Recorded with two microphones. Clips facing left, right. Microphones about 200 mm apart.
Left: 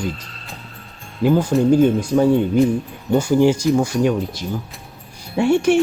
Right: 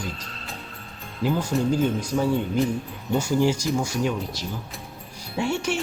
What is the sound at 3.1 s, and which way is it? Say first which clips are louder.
Speech: left 7 dB; 55° left (ahead or behind).